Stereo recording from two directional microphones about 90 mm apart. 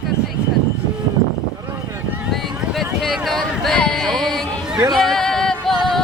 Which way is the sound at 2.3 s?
Centre (ahead or behind).